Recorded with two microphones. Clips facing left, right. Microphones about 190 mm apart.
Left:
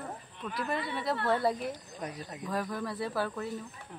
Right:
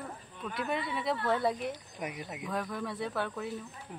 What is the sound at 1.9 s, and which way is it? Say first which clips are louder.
Speech: right 1 dB; 10° right (ahead or behind).